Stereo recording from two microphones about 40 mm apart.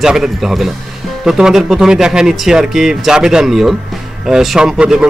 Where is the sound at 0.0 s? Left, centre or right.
Centre.